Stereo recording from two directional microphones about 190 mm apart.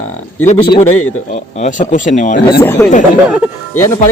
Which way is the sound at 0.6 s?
25° left (ahead or behind).